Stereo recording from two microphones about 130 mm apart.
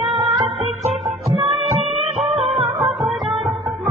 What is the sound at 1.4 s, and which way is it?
Music, 45° right (ahead or behind).